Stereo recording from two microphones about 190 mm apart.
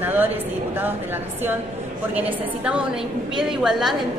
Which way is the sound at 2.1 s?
5° right (ahead or behind).